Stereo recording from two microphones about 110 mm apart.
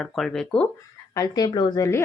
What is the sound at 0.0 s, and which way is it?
Speech, 5° left (ahead or behind).